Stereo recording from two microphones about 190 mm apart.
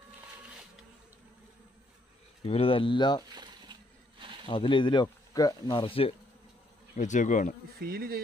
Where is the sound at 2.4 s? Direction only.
30° left (ahead or behind).